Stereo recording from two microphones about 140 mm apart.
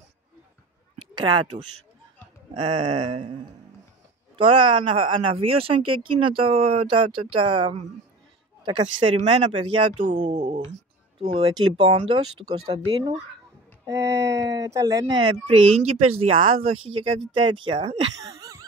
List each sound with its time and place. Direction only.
1.1 s speech: 30° right (ahead or behind)
4.4 s speech: 35° right (ahead or behind)
13.8 s speech: 25° right (ahead or behind)
15.1 s speech: 35° right (ahead or behind)